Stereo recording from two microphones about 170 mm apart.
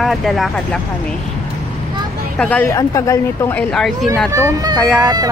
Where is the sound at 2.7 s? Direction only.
20° left (ahead or behind).